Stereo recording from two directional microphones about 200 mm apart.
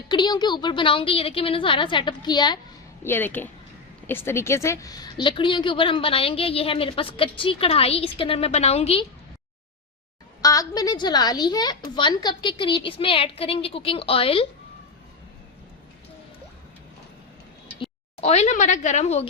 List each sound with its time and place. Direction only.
0.1 s a woman's voice: 20° left (ahead or behind)
3.0 s a woman's voice: 10° left (ahead or behind); by 9.0 s 30° left (ahead or behind)
10.4 s a woman's voice: 15° left (ahead or behind)
18.2 s a woman's voice: 35° left (ahead or behind)